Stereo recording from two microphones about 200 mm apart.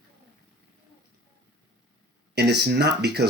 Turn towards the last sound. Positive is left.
turn(degrees=-55)  # may be behind; listen again after turning